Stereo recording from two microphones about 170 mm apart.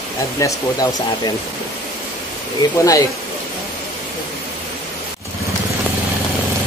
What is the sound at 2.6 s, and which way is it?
Speech, 20° left (ahead or behind).